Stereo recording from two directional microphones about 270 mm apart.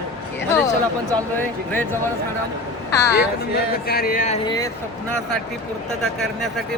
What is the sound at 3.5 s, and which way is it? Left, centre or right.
Speech, left.